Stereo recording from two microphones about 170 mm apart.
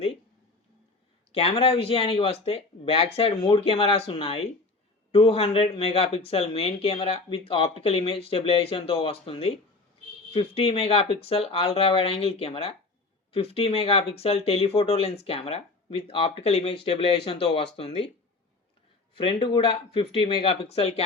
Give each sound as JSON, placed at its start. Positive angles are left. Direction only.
{"t": 1.3, "sound": "speech", "side_deg": 35}
{"t": 19.1, "sound": "speech", "side_deg": 30}